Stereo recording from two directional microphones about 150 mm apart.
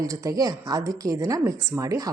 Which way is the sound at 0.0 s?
20° right (ahead or behind).